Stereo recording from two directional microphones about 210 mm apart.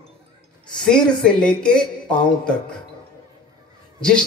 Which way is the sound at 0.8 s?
5° left (ahead or behind).